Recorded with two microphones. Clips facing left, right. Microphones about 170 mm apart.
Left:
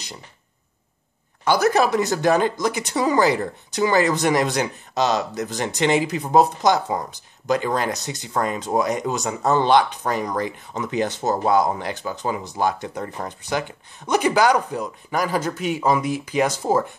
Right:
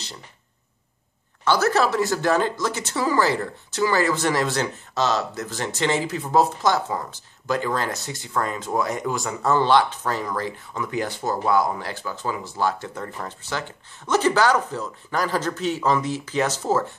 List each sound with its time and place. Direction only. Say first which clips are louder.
1.4 s speech: left 2 dB; 15° left (ahead or behind)